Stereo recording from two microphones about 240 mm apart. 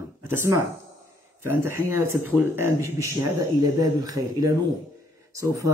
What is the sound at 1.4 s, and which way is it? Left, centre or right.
Speech, right.